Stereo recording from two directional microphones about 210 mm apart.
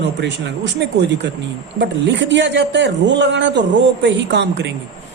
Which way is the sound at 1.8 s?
60° right (ahead or behind).